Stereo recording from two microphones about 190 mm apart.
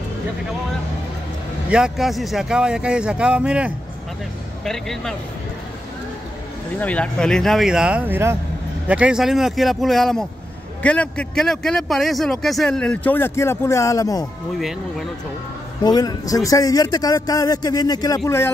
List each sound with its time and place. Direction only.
1.7 s speech: 5° right (ahead or behind)
6.8 s a man's voice: 5° left (ahead or behind)
14.6 s speech: centre (ahead or behind)
15.8 s a man's voice: 20° left (ahead or behind)